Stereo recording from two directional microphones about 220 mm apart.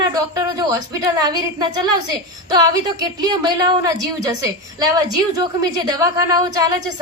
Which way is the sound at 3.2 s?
20° right (ahead or behind).